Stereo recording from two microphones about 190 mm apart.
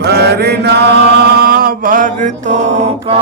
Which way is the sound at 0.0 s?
60° right (ahead or behind).